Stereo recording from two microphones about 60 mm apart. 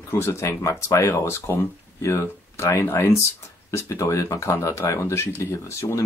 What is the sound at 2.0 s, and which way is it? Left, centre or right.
Speech, left.